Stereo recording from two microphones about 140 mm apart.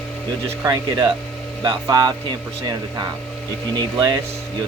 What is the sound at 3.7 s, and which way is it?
Speech, 30° right (ahead or behind).